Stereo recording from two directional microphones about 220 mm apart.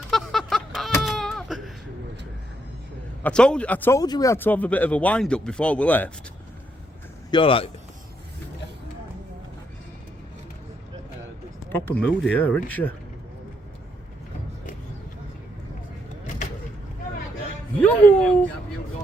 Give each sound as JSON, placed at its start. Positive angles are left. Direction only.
{"t": 0.1, "sound": "a sound", "side_deg": 0}
{"t": 1.0, "sound": "baby cry", "side_deg": 0}
{"t": 3.2, "sound": "speech", "side_deg": 5}
{"t": 7.3, "sound": "speech", "side_deg": 25}
{"t": 11.7, "sound": "speech", "side_deg": 5}
{"t": 17.7, "sound": "speech", "side_deg": 5}